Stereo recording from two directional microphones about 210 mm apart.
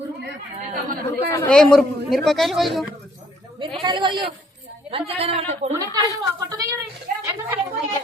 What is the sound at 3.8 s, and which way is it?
A woman's voice, 20° right (ahead or behind).